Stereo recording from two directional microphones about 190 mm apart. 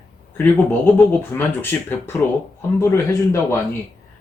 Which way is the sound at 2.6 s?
15° left (ahead or behind).